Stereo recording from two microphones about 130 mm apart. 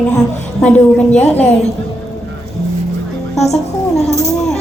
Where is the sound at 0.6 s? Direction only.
10° left (ahead or behind).